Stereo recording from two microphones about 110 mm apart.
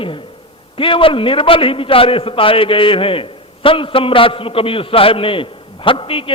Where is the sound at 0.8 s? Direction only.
55° left (ahead or behind).